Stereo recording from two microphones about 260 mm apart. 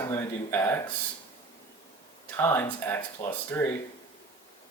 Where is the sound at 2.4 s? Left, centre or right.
Centre.